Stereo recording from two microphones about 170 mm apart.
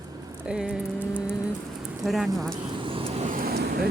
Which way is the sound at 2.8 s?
35° right (ahead or behind).